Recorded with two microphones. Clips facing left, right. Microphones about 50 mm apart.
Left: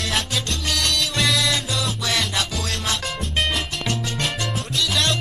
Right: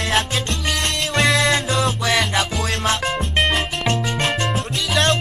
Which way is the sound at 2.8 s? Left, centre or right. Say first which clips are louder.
Right 6 dB; right.